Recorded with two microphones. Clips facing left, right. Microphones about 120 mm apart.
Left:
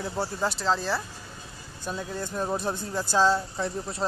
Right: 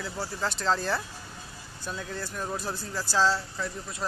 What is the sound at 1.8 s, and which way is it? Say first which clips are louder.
Speech: left 3 dB; 15° left (ahead or behind).